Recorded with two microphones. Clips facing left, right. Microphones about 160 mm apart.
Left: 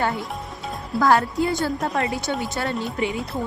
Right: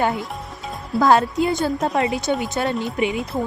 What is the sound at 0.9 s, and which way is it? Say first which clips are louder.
A woman's voice: right 3 dB; 20° right (ahead or behind).